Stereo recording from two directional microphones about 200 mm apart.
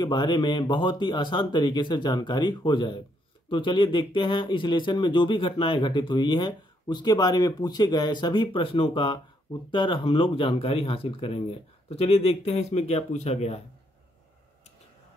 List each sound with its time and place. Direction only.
0.0 s speech: 20° left (ahead or behind)